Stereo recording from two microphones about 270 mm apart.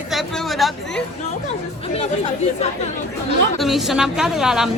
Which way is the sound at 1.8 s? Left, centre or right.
Left.